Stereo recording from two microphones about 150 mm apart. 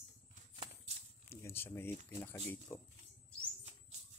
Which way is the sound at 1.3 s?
15° left (ahead or behind).